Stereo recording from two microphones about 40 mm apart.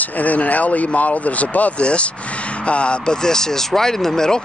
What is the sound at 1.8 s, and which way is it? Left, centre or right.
Speech, left.